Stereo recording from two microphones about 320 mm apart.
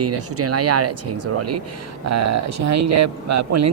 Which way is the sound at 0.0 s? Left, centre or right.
Right.